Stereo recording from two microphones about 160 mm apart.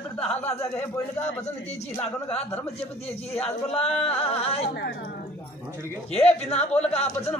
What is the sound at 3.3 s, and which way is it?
Male singing, 40° left (ahead or behind).